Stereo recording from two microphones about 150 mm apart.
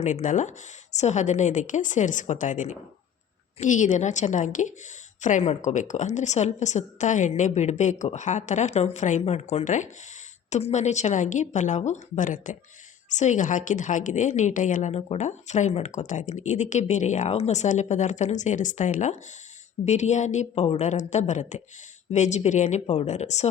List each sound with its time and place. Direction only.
0.0 s a woman's voice: 55° left (ahead or behind)